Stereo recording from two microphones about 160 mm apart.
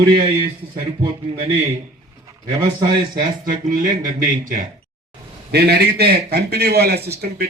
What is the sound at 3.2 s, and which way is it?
Speech, 60° right (ahead or behind).